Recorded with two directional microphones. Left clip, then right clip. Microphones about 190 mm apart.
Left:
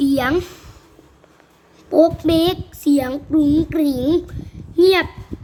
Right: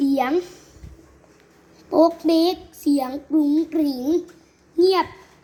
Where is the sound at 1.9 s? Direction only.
5° left (ahead or behind).